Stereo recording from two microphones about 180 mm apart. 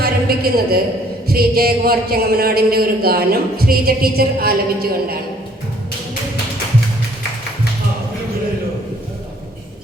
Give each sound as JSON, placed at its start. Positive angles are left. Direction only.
{"t": 0.0, "sound": "a woman's voice", "side_deg": -55}